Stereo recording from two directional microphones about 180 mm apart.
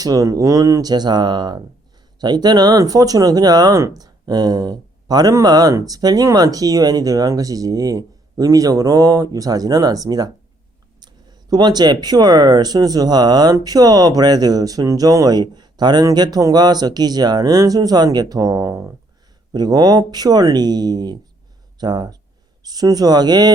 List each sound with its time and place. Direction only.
0.0 s speech: 20° right (ahead or behind)